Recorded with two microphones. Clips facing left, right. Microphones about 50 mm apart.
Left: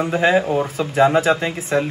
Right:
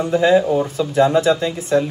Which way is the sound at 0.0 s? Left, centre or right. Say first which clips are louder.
Right 2 dB; left.